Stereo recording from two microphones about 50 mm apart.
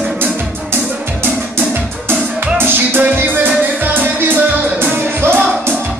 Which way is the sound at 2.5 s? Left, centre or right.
Right.